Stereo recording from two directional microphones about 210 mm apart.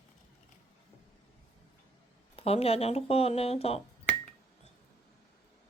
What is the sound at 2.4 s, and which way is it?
Speech, 30° left (ahead or behind).